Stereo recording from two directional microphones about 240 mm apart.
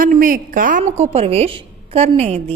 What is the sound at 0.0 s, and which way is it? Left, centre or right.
A woman's voice, right.